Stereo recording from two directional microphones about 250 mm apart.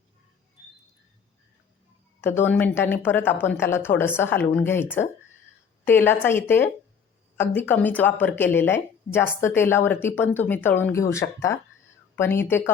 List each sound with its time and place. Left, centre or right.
2.2 s a woman's voice: centre